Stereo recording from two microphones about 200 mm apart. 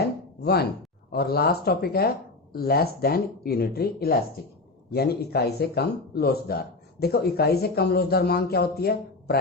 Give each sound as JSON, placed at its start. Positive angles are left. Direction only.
{"t": 0.4, "sound": "speech", "side_deg": 55}